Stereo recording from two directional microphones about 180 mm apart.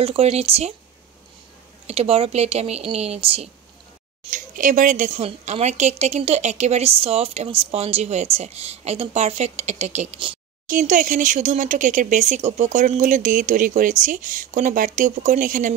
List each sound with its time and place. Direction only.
0.0 s speech: 35° right (ahead or behind)
1.9 s speech: 35° right (ahead or behind)
4.2 s speech: 50° right (ahead or behind); by 10.4 s 30° right (ahead or behind)
10.7 s speech: 50° right (ahead or behind)